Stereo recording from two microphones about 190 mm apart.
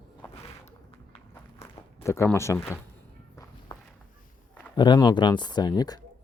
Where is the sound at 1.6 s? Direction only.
30° left (ahead or behind).